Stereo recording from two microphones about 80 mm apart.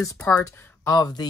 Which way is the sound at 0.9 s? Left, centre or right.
Left.